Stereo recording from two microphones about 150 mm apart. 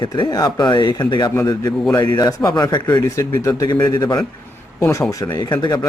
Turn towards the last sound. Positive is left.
turn(degrees=25)  # may be behind; listen again after turning